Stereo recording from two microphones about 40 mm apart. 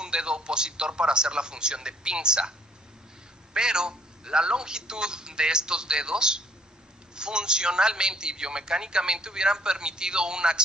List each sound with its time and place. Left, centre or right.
0.0 s a man's voice: right
3.5 s a man's voice: centre